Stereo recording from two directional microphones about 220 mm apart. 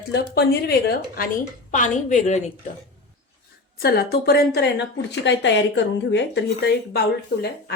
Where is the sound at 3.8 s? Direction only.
45° left (ahead or behind).